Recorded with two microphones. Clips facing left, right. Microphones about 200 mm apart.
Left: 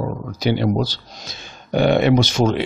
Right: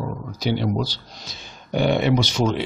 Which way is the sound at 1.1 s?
90° left.